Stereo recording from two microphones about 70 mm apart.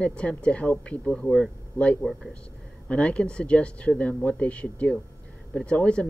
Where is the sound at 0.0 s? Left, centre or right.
Centre.